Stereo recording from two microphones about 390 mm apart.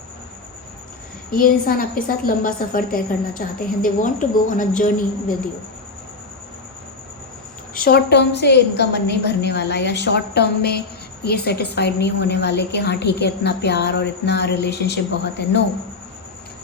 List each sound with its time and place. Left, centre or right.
1.3 s a woman's voice: left
7.9 s a woman's voice: left